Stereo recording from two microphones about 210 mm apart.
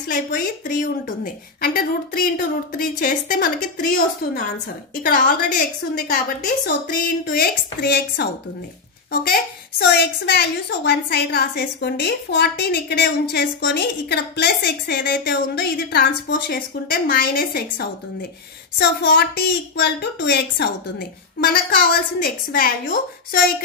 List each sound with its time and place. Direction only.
0.1 s a woman's voice: 40° left (ahead or behind)